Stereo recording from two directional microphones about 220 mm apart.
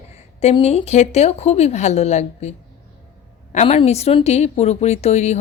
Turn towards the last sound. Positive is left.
turn(degrees=30)  # may be behind; listen again after turning